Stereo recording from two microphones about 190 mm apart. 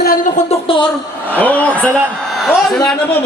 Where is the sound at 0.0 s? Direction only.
50° left (ahead or behind).